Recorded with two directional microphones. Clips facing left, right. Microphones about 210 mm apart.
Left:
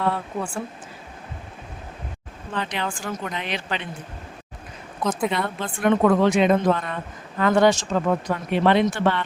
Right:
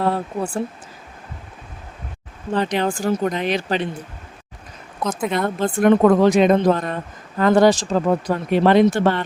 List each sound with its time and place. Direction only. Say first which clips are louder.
0.0 s speech: right 4 dB; 40° right (ahead or behind)
2.5 s speech: right 8 dB; 40° right (ahead or behind)
5.3 s speech: right 6 dB; 45° right (ahead or behind)